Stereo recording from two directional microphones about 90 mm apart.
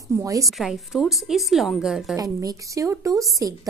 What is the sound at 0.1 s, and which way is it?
Speech, 40° right (ahead or behind).